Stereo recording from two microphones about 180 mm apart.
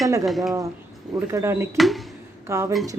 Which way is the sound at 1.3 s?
15° right (ahead or behind).